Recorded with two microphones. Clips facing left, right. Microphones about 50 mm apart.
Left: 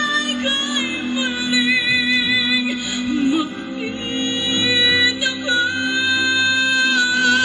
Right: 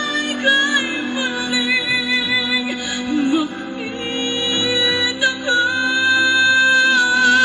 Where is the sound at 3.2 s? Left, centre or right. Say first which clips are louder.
Right 1 dB; right.